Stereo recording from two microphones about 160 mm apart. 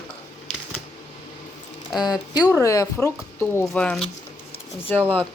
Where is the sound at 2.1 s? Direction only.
25° left (ahead or behind).